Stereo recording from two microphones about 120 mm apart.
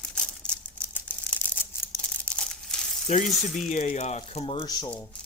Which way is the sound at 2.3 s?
5° left (ahead or behind).